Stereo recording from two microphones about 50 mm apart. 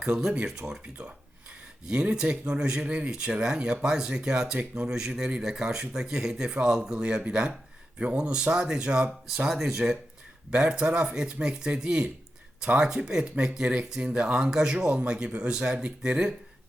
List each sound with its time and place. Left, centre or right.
0.0 s speech: centre